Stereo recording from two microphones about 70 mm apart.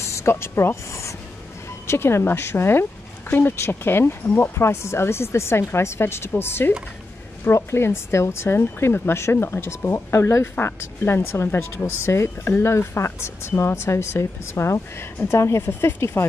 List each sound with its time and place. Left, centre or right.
0.0 s speech: left